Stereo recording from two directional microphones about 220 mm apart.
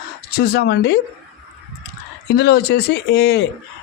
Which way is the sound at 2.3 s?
45° left (ahead or behind).